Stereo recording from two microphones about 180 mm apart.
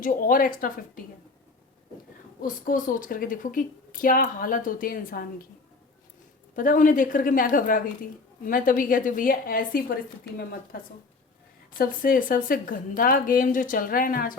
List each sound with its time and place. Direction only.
0.0 s a woman's voice: 50° left (ahead or behind)
2.4 s a woman's voice: 50° left (ahead or behind)
6.6 s a woman's voice: 50° left (ahead or behind)